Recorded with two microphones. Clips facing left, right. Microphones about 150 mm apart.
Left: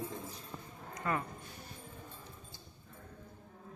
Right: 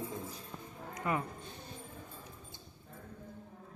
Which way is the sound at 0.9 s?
15° right (ahead or behind).